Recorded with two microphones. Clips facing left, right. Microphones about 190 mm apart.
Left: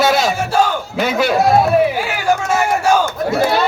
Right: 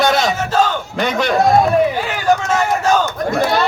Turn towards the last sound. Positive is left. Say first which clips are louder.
# left 1 dB
turn(degrees=5)  # may be behind; listen again after turning